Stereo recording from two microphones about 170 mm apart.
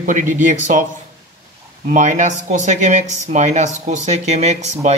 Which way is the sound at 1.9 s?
45° right (ahead or behind).